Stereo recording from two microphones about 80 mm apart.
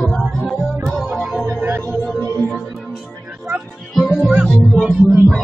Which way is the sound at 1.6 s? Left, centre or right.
Right.